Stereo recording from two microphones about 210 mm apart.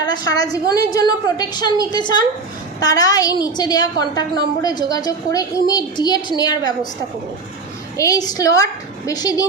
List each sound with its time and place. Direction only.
0.0 s a woman's voice: 20° left (ahead or behind)
7.9 s a woman's voice: 15° left (ahead or behind)